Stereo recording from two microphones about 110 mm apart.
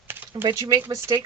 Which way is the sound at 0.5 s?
30° right (ahead or behind).